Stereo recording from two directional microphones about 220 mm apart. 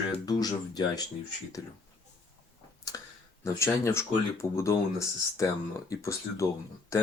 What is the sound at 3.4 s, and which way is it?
Speech, 15° left (ahead or behind).